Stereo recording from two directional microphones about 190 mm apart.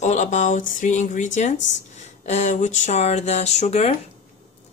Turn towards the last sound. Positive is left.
turn(degrees=35)  # may be behind; listen again after turning